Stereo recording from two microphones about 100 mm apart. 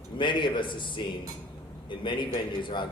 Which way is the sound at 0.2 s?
55° left (ahead or behind).